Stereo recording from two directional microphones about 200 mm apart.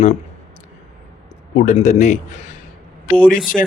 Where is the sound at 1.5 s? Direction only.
40° left (ahead or behind).